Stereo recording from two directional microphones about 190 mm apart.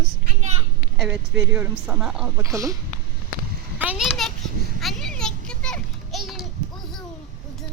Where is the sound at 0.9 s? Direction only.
5° right (ahead or behind).